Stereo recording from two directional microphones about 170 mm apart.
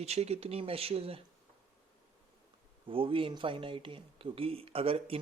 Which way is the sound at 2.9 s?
30° right (ahead or behind).